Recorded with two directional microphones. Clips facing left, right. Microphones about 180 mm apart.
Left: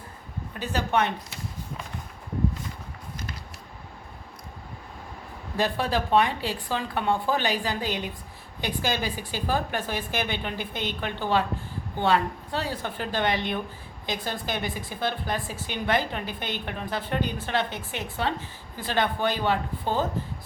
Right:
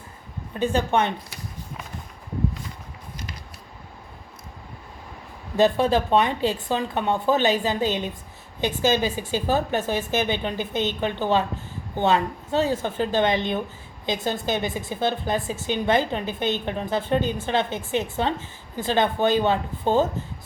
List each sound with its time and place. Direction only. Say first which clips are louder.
0.7 s a woman's voice: right 2 dB; 25° right (ahead or behind)
5.5 s a woman's voice: right 7 dB; 20° right (ahead or behind)